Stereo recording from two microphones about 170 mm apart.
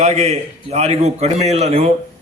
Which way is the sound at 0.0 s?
40° right (ahead or behind).